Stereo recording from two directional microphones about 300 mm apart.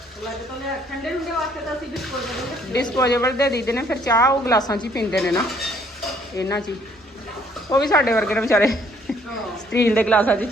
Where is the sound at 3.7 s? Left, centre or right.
Centre.